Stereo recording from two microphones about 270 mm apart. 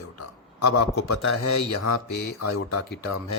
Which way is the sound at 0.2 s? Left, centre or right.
Left.